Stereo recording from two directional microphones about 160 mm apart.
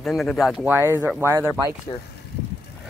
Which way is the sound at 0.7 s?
15° right (ahead or behind).